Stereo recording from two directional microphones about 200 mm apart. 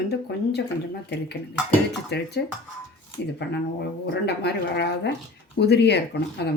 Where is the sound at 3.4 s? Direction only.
55° left (ahead or behind).